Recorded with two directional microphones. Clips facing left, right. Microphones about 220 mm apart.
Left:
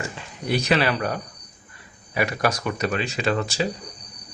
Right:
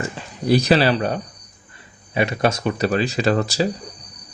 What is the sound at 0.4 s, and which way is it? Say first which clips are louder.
Speech: right 6 dB; 35° right (ahead or behind).